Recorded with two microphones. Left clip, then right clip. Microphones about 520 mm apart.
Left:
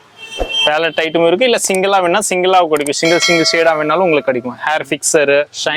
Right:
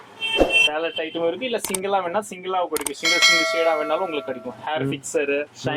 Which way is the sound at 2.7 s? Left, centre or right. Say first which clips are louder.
Left 9 dB; centre.